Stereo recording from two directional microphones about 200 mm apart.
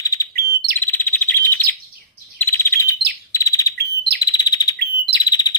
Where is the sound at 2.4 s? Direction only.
10° left (ahead or behind).